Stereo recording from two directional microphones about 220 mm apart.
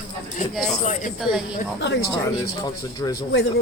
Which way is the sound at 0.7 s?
35° left (ahead or behind).